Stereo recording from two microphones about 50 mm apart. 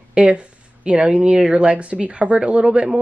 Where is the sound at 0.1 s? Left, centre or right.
Right.